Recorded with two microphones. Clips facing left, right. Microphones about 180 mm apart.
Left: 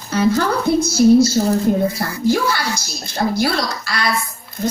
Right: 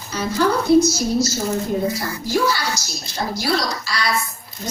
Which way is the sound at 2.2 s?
55° left (ahead or behind).